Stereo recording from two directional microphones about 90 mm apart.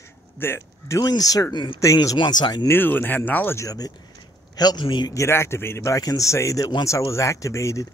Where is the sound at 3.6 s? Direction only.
45° left (ahead or behind).